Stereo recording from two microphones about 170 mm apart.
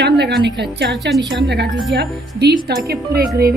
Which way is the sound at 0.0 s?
75° right (ahead or behind).